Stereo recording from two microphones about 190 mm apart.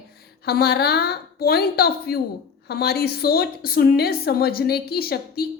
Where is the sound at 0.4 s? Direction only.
55° left (ahead or behind).